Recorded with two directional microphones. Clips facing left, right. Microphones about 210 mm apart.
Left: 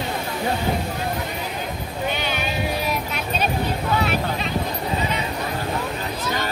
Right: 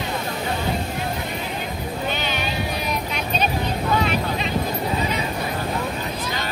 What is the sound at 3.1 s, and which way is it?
Music, 5° left (ahead or behind).